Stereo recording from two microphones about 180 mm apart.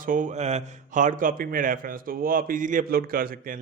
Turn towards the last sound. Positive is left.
turn(degrees=-55)  # may be behind; listen again after turning